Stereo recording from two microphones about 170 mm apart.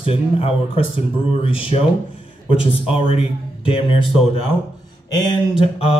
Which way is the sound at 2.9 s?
35° left (ahead or behind).